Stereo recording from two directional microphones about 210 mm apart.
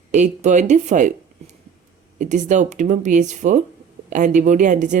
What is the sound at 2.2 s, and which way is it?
Speech, 35° right (ahead or behind).